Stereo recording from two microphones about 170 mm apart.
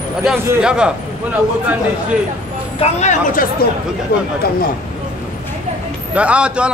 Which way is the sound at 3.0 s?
55° left (ahead or behind).